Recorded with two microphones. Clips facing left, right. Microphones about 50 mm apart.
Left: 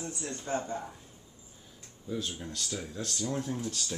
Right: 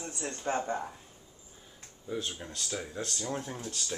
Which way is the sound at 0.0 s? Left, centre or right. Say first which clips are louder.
Right 2 dB; right.